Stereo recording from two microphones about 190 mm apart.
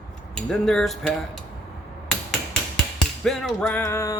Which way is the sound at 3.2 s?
Centre (ahead or behind).